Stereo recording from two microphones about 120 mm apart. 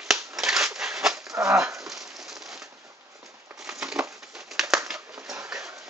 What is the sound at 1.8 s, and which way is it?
Rain on surface, centre (ahead or behind).